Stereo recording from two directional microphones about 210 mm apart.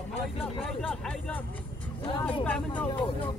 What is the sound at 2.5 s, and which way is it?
Speech, 5° left (ahead or behind).